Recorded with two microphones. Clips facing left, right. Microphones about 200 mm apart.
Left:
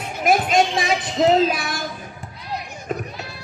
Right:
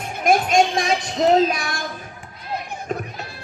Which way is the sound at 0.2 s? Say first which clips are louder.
Right 1 dB; 5° left (ahead or behind).